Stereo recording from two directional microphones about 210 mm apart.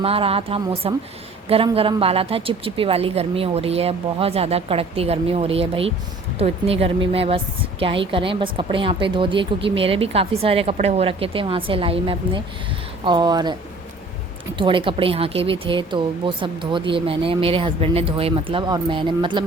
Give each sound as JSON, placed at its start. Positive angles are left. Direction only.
{"t": 0.0, "sound": "a woman's voice", "side_deg": -25}
{"t": 14.6, "sound": "a woman's voice", "side_deg": -25}